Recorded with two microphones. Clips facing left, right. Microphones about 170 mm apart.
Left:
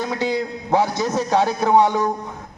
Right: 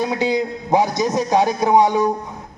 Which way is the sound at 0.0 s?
15° right (ahead or behind).